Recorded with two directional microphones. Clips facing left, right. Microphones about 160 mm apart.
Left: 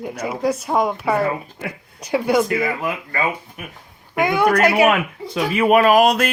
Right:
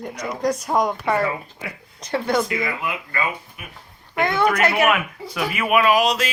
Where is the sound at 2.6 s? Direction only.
45° left (ahead or behind).